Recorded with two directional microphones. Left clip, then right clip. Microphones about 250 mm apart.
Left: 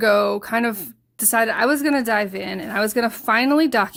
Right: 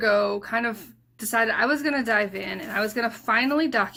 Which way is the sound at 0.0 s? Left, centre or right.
Left.